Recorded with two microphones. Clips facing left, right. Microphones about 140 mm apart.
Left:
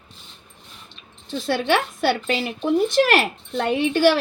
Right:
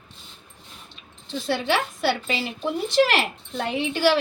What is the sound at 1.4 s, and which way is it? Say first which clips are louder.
Speech: left 3 dB; 50° left (ahead or behind).